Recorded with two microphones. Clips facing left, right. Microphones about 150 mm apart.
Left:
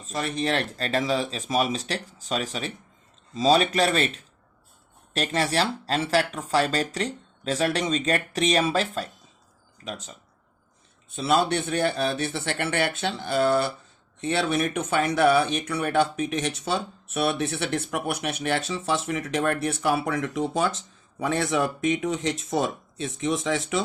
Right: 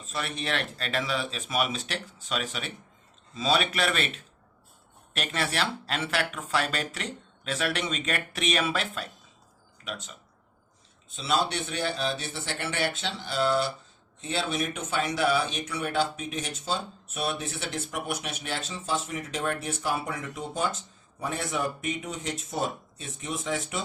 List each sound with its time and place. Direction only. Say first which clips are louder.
0.0 s speech: left 6 dB; 40° left (ahead or behind)
11.1 s speech: left 5 dB; 55° left (ahead or behind); by 23.8 s 90° left